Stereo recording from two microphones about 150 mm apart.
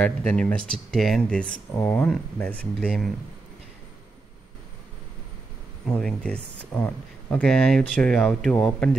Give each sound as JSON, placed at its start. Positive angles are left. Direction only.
{"t": 0.0, "sound": "speech", "side_deg": 5}
{"t": 1.7, "sound": "speech", "side_deg": 20}
{"t": 2.0, "sound": "speech", "side_deg": 5}
{"t": 5.9, "sound": "speech", "side_deg": 5}